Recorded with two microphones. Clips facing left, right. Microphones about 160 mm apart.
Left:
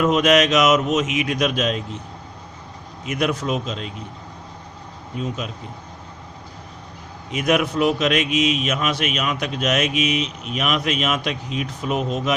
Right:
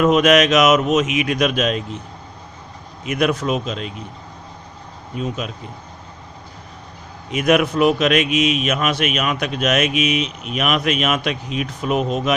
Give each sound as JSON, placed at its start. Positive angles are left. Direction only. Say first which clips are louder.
{"t": 0.0, "sound": "a man's voice", "louder": "right 3 dB", "side_deg": -60}
{"t": 3.1, "sound": "speech", "louder": "right 3 dB", "side_deg": -65}
{"t": 5.2, "sound": "a man's voice", "louder": "right 2 dB", "side_deg": -60}
{"t": 7.3, "sound": "a man's voice", "louder": "right 3 dB", "side_deg": -60}